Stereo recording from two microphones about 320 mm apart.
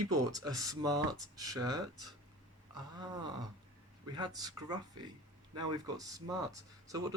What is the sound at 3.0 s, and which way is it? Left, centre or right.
Speech, centre.